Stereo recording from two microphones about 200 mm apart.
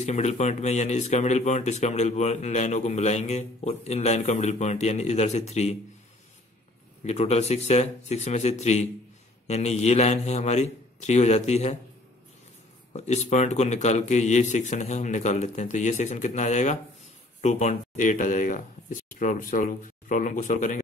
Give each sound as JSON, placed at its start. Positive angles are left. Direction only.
{"t": 0.0, "sound": "speech", "side_deg": 35}
{"t": 7.1, "sound": "speech", "side_deg": 35}
{"t": 12.9, "sound": "speech", "side_deg": 35}